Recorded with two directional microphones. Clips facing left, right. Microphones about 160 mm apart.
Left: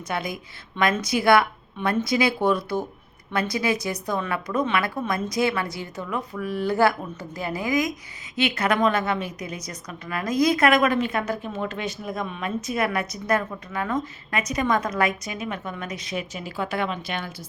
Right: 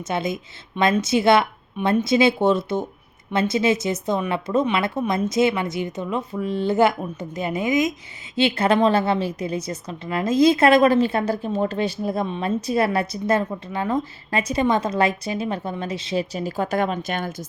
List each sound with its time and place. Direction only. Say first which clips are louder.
0.1 s a woman's voice: right 4 dB; 25° right (ahead or behind); by 17.3 s 45° right (ahead or behind)